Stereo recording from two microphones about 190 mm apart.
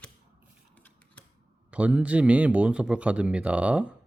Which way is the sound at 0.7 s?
10° left (ahead or behind).